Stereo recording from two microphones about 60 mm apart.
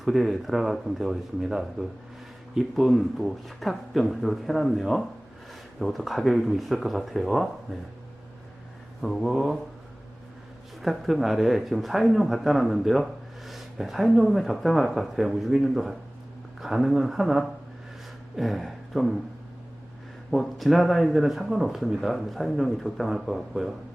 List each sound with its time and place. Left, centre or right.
0.0 s speech: centre
9.0 s speech: centre
10.8 s speech: centre
20.3 s speech: centre